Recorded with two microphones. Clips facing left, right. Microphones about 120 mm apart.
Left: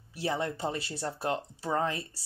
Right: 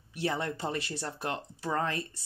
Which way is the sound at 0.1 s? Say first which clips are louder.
Even; 25° left (ahead or behind).